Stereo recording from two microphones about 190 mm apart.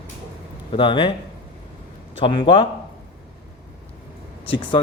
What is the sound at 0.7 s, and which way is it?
Speech, 25° left (ahead or behind).